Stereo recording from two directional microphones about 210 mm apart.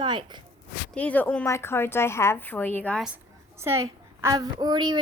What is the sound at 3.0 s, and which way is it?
A woman's voice, 10° right (ahead or behind).